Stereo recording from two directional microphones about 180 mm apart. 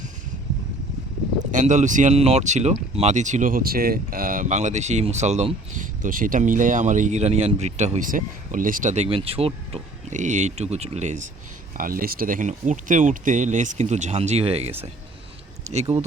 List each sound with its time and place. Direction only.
1.4 s speech: 45° right (ahead or behind)
11.8 s speech: 50° right (ahead or behind)